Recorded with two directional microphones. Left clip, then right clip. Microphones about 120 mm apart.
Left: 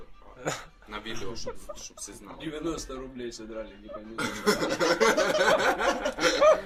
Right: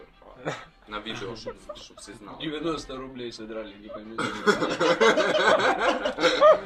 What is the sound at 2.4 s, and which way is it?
A man's voice, centre (ahead or behind).